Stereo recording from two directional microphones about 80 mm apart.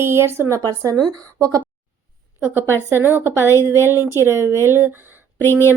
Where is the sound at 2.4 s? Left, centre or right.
Right.